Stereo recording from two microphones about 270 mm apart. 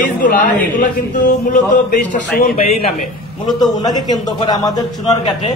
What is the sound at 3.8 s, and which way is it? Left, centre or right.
A woman's voice, centre.